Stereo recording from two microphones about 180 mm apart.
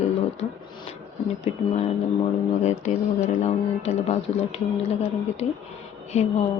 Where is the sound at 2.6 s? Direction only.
40° left (ahead or behind).